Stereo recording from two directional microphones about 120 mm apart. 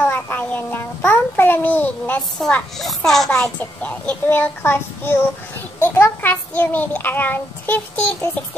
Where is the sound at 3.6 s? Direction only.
10° left (ahead or behind).